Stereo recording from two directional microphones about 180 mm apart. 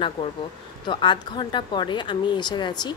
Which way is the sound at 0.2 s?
25° left (ahead or behind).